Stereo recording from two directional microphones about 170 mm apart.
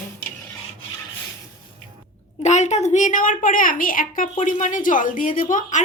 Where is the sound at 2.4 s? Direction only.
40° left (ahead or behind).